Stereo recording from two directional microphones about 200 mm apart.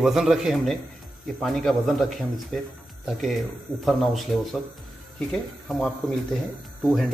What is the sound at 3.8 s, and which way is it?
Speech, centre (ahead or behind).